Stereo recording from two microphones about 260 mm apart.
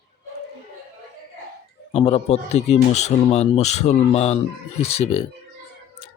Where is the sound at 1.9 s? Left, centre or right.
Left.